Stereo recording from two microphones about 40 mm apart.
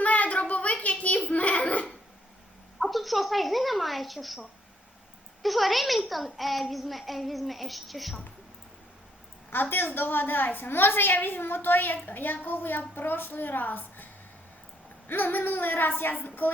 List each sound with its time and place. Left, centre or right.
0.0 s a sound: left
2.7 s a woman's voice: centre
5.4 s a child's voice: centre
9.5 s a woman's voice: left